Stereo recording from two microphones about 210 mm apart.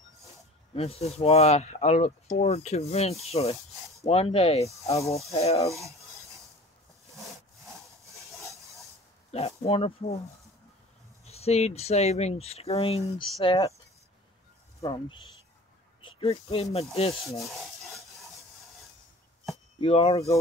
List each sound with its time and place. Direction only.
0.7 s speech: 30° left (ahead or behind)
4.8 s speech: 15° left (ahead or behind)
5.3 s speech: 30° left (ahead or behind)
9.3 s speech: 30° left (ahead or behind)
11.2 s speech: 30° left (ahead or behind)
14.8 s speech: 20° left (ahead or behind)
19.8 s speech: 25° left (ahead or behind)